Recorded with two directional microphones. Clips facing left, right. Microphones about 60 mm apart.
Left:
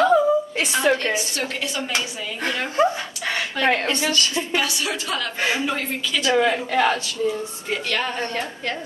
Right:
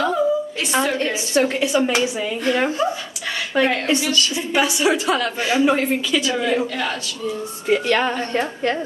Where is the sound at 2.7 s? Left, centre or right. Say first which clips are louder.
Left 2 dB; left.